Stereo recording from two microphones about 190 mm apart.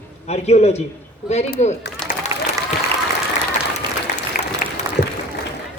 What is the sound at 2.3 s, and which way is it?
Applause, 15° right (ahead or behind).